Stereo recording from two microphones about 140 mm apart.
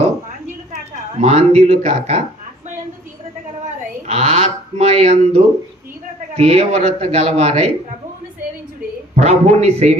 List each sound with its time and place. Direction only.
1.2 s a man's voice: 50° right (ahead or behind)
4.0 s a sound: 55° right (ahead or behind)
6.3 s a man's voice: 50° right (ahead or behind)
9.1 s a man's voice: 55° right (ahead or behind)